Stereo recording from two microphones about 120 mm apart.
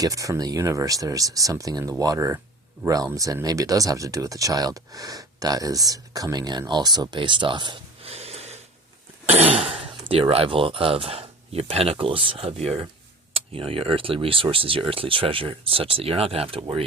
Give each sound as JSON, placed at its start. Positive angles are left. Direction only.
{"t": 0.0, "sound": "speech", "side_deg": -30}
{"t": 8.1, "sound": "snort", "side_deg": -60}
{"t": 9.2, "sound": "speech", "side_deg": -60}